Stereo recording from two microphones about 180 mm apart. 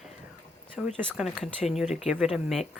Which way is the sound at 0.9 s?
Centre (ahead or behind).